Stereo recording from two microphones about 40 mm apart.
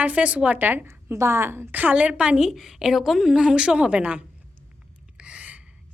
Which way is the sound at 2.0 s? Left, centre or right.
Right.